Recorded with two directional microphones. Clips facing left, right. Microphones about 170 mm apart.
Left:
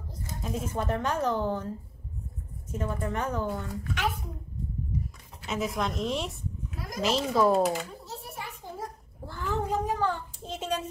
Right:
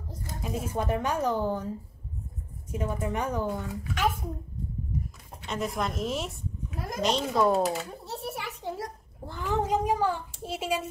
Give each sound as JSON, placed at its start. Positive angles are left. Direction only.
{"t": 0.4, "sound": "speech", "side_deg": -10}
{"t": 2.7, "sound": "speech", "side_deg": -15}
{"t": 5.4, "sound": "a child's voice", "side_deg": 0}
{"t": 8.0, "sound": "a sound", "side_deg": -70}
{"t": 9.2, "sound": "a sound", "side_deg": -15}
{"t": 9.7, "sound": "speech", "side_deg": -10}